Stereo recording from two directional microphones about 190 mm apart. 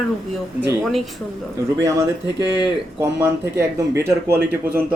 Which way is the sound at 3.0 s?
15° right (ahead or behind).